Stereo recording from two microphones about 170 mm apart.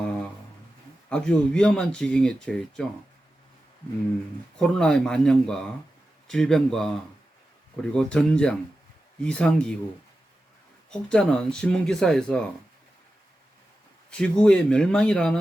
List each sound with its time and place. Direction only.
1.1 s speech: 5° left (ahead or behind)
4.5 s speech: 5° left (ahead or behind)
11.1 s speech: 5° left (ahead or behind)
14.1 s speech: 5° left (ahead or behind)